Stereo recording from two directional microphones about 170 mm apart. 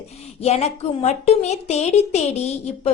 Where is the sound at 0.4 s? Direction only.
40° left (ahead or behind).